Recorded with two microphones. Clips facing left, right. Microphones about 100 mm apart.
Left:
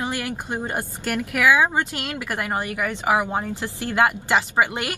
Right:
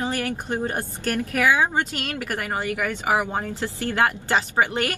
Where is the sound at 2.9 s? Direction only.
15° left (ahead or behind).